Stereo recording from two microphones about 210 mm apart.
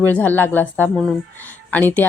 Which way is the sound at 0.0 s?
10° left (ahead or behind).